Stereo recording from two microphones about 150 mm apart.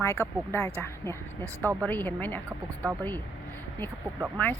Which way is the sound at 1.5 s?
20° right (ahead or behind).